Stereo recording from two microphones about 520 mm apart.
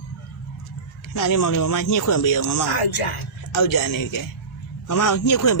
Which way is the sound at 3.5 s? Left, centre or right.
Left.